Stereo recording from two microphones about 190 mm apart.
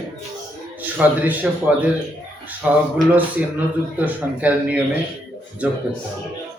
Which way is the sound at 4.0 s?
10° right (ahead or behind).